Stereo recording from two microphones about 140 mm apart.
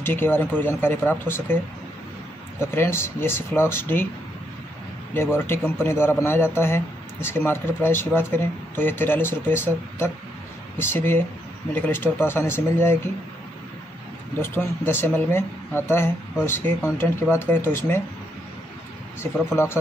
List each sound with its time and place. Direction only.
0.0 s a man's voice: 15° left (ahead or behind)
2.6 s a man's voice: 15° left (ahead or behind)
5.1 s a man's voice: 15° left (ahead or behind)
14.4 s a man's voice: 15° left (ahead or behind)
19.5 s a man's voice: 15° left (ahead or behind)